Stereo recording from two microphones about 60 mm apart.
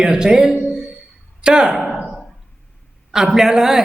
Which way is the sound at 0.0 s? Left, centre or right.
Centre.